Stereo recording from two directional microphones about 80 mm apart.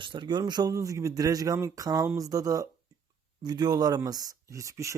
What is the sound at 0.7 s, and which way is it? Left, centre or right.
Speech, right.